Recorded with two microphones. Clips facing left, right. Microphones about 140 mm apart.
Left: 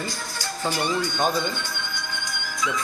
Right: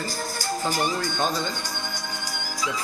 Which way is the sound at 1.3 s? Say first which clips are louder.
Left 2 dB; 40° right (ahead or behind).